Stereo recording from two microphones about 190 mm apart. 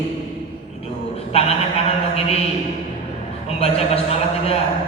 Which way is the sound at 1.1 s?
30° left (ahead or behind).